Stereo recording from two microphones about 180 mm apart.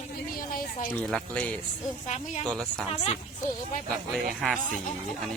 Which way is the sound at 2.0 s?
40° left (ahead or behind).